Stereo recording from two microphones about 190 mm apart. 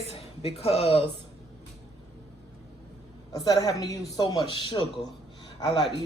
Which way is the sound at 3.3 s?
20° left (ahead or behind).